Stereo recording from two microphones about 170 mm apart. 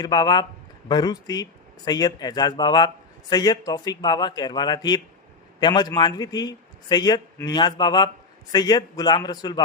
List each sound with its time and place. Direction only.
0.0 s speech: 25° left (ahead or behind)